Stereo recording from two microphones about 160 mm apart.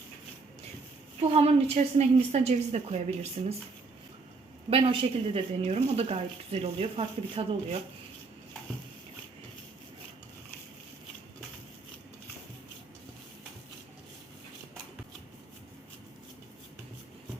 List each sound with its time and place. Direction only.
1.2 s speech: 40° right (ahead or behind)
4.7 s speech: 35° right (ahead or behind)